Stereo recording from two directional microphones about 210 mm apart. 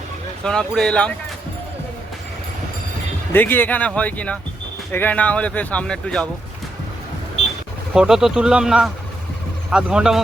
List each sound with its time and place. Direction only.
0.4 s speech: 5° left (ahead or behind)
3.3 s speech: 10° left (ahead or behind)
7.4 s a sound: 30° left (ahead or behind)
7.9 s speech: 5° right (ahead or behind)